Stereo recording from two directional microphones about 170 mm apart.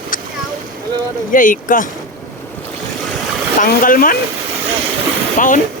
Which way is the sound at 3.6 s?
55° left (ahead or behind).